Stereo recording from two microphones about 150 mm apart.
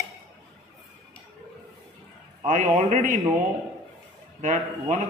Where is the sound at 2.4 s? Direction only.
60° right (ahead or behind).